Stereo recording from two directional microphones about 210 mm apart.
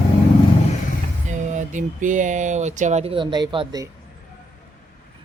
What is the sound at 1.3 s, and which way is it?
Speech, 35° right (ahead or behind).